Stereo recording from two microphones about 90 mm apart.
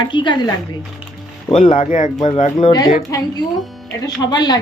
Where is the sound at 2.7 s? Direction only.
40° left (ahead or behind).